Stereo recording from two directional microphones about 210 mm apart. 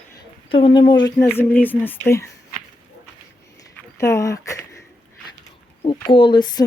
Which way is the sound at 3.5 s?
15° left (ahead or behind).